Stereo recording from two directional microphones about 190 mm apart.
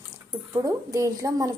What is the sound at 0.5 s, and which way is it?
Speech, 15° right (ahead or behind).